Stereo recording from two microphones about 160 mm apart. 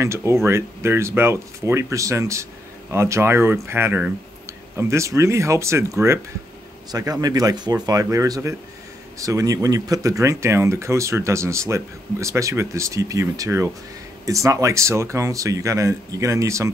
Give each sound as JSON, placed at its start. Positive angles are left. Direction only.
{"t": 0.0, "sound": "speech", "side_deg": -15}